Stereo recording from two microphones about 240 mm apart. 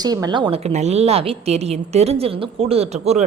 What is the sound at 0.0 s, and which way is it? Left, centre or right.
Speech, centre.